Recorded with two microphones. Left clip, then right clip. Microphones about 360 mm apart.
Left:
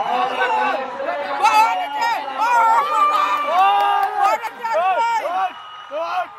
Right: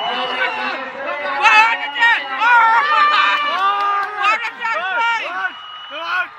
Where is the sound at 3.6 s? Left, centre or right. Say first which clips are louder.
Left 2 dB; left.